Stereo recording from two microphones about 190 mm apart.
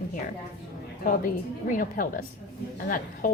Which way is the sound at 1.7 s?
45° left (ahead or behind).